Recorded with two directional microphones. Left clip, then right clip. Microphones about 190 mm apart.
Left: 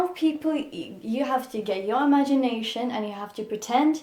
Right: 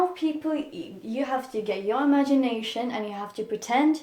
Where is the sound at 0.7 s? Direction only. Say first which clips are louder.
Left 2 dB; 30° left (ahead or behind).